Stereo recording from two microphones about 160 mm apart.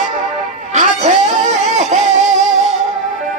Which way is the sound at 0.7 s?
45° right (ahead or behind).